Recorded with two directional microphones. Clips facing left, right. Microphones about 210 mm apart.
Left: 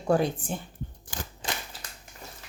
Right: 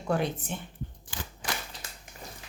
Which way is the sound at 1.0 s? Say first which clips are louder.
Left 2 dB; 45° left (ahead or behind).